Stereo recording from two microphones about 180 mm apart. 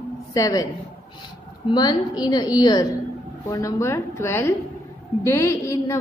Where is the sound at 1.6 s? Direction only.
25° left (ahead or behind).